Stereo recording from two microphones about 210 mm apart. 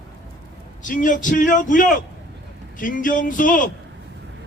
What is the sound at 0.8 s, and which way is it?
A man's voice, 40° left (ahead or behind).